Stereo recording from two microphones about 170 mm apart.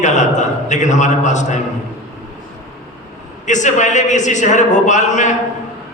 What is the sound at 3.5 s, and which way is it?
A man's voice, 45° left (ahead or behind).